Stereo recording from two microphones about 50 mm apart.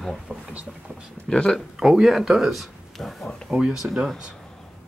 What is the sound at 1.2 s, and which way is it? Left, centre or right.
Speech, centre.